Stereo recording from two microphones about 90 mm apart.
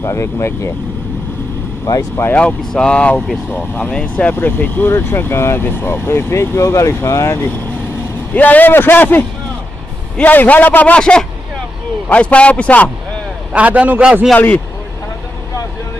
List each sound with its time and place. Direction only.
0.0 s speech: 30° left (ahead or behind)
2.3 s a man's voice: 10° left (ahead or behind); by 7.3 s 35° left (ahead or behind)
8.4 s a man's voice: 20° left (ahead or behind)
13.5 s a man's voice: 15° right (ahead or behind)
14.3 s speech: 20° left (ahead or behind)